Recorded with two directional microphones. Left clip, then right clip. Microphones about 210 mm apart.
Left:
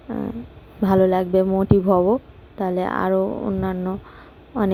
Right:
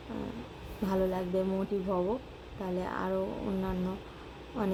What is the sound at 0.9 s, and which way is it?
A woman's voice, 40° left (ahead or behind).